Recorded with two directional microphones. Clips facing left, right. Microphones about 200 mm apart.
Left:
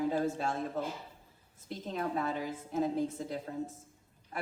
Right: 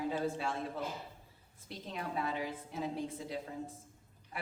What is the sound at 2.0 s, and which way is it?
A woman's voice, 45° left (ahead or behind).